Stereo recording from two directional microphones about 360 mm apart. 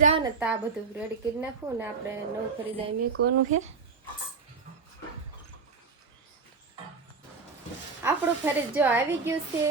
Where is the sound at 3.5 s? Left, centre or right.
Centre.